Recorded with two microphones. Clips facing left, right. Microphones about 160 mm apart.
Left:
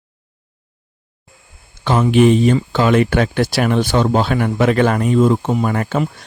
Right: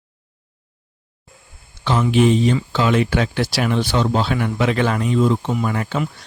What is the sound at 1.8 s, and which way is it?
Speech, 50° left (ahead or behind).